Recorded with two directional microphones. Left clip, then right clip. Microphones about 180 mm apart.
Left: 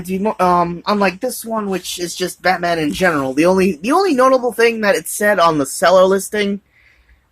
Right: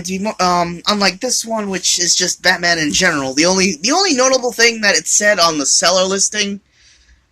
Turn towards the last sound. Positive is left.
turn(degrees=20)  # may be behind; listen again after turning